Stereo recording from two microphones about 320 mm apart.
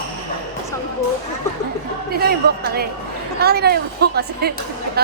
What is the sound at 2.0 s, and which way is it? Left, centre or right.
A woman's voice, right.